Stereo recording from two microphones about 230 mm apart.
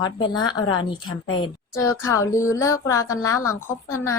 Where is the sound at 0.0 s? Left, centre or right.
Centre.